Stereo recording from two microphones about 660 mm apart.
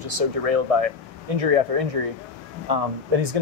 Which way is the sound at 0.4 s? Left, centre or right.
Right.